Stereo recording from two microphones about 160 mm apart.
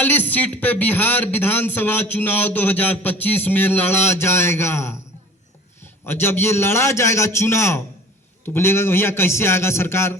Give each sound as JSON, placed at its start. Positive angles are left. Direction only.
{"t": 0.0, "sound": "a man's voice", "side_deg": 10}